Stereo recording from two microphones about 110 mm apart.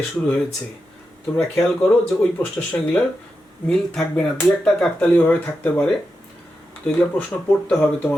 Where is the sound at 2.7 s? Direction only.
15° left (ahead or behind).